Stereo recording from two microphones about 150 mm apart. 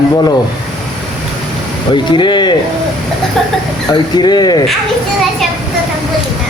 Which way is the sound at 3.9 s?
30° left (ahead or behind).